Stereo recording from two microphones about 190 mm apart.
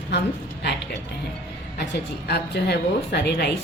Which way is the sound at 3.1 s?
60° left (ahead or behind).